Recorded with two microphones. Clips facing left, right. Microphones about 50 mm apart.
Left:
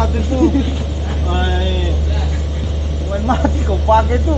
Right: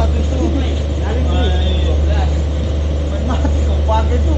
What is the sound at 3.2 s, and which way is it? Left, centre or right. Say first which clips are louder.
Speech: left 6 dB; left.